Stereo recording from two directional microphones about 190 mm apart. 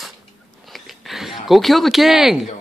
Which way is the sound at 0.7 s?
Centre (ahead or behind).